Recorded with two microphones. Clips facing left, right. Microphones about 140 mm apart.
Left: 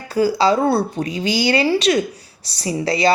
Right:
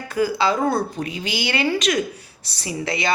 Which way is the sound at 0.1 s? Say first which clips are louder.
Left 4 dB; 35° left (ahead or behind).